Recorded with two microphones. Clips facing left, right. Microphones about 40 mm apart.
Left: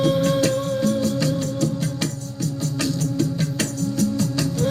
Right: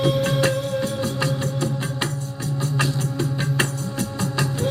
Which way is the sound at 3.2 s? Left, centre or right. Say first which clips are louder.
Right 3 dB; right.